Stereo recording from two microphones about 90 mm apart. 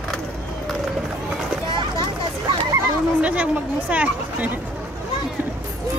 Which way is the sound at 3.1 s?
15° right (ahead or behind).